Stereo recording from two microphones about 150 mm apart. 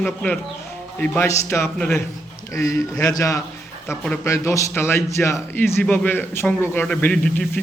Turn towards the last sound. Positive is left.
turn(degrees=5)  # may be behind; listen again after turning